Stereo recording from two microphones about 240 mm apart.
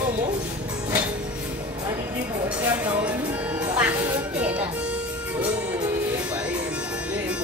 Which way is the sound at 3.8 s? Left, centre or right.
Centre.